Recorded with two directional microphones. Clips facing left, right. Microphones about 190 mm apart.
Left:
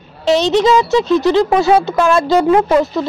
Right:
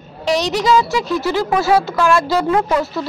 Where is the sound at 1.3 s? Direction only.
20° left (ahead or behind).